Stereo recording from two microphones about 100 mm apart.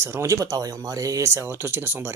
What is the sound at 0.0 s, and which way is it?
Speech, 25° right (ahead or behind).